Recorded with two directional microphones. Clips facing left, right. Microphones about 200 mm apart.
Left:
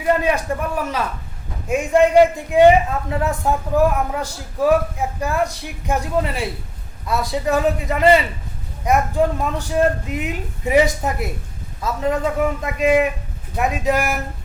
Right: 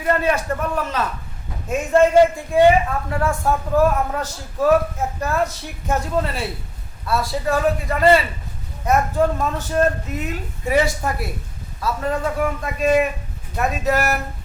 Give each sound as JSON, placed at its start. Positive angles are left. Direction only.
{"t": 0.0, "sound": "a man's voice", "side_deg": 15}